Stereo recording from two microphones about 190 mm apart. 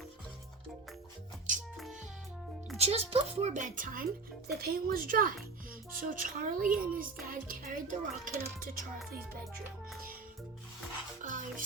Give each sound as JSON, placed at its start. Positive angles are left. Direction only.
{"t": 2.7, "sound": "a woman's voice", "side_deg": -35}
{"t": 11.2, "sound": "music", "side_deg": -45}